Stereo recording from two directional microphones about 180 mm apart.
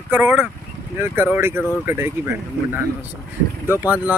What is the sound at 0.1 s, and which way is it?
Speech, 10° right (ahead or behind).